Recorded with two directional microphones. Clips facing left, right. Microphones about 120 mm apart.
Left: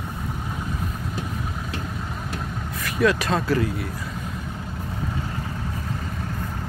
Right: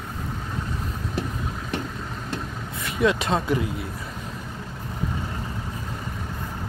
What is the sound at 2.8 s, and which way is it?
Speech, 25° right (ahead or behind).